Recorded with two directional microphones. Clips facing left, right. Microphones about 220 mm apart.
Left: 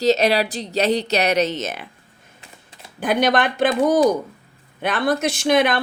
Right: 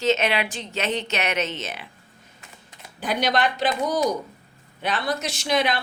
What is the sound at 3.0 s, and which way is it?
Speech, 50° left (ahead or behind).